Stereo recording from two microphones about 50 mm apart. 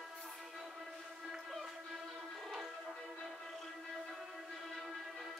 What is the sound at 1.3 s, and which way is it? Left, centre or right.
Music, centre.